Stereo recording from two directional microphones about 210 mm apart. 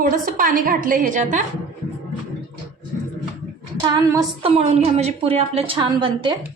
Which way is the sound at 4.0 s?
15° right (ahead or behind).